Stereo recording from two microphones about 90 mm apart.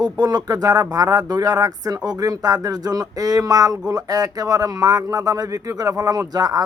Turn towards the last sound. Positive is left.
turn(degrees=-45)  # may be behind; listen again after turning